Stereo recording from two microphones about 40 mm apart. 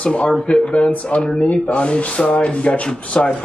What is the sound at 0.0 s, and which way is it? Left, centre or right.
Speech, left.